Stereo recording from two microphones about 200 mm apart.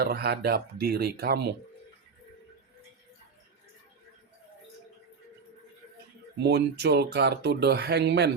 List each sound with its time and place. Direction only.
0.0 s speech: 50° right (ahead or behind)
6.4 s speech: 55° right (ahead or behind)